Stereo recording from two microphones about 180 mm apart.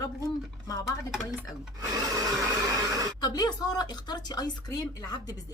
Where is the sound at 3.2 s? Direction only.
25° left (ahead or behind).